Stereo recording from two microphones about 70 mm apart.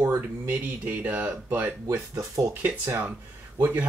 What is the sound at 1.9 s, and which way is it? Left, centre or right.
Speech, right.